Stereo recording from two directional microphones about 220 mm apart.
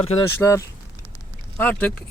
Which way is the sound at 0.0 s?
25° left (ahead or behind).